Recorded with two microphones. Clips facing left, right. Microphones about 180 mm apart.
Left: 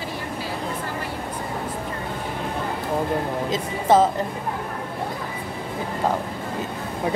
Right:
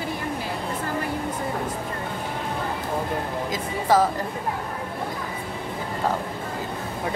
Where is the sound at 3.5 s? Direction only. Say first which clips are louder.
Left 3 dB; 25° left (ahead or behind).